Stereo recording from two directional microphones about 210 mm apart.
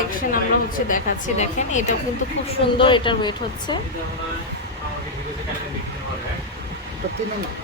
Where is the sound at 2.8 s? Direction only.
25° left (ahead or behind).